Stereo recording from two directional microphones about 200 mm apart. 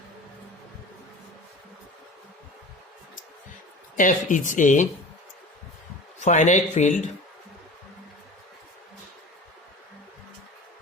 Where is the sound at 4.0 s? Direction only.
40° left (ahead or behind).